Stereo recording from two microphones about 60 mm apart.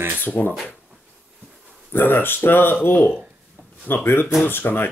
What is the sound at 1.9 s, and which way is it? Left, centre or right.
Speech, left.